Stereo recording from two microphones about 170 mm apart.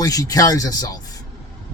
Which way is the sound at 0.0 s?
20° left (ahead or behind).